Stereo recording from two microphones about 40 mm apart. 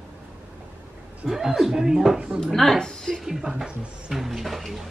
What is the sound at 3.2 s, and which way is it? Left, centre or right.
Speech, centre.